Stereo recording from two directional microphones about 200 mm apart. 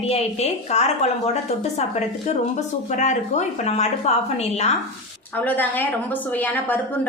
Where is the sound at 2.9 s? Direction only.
35° left (ahead or behind).